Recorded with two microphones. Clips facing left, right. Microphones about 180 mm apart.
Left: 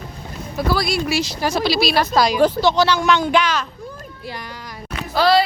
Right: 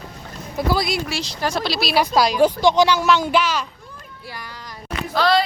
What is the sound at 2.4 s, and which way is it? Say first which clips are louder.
Speech: right 3 dB; 15° right (ahead or behind).